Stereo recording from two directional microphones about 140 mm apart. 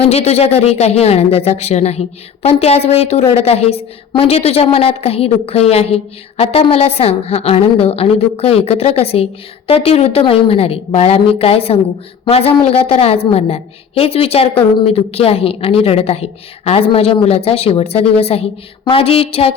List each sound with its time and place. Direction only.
0.0 s a woman's voice: 50° left (ahead or behind)